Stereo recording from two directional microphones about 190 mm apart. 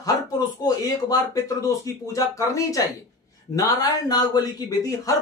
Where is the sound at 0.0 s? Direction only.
20° left (ahead or behind).